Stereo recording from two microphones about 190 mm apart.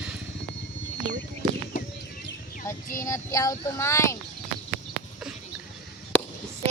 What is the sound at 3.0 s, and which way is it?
Speech, 15° left (ahead or behind).